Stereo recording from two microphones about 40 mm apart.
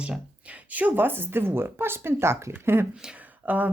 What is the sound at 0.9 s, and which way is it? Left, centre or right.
Speech, right.